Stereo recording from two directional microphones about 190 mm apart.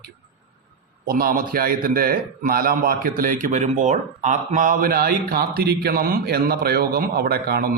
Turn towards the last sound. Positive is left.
turn(degrees=-55)  # may be behind; listen again after turning